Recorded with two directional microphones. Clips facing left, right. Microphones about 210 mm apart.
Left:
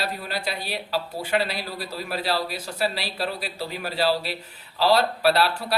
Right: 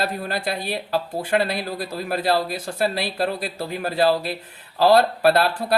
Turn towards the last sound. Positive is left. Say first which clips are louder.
# right 3 dB
turn(degrees=-50)  # may be behind; listen again after turning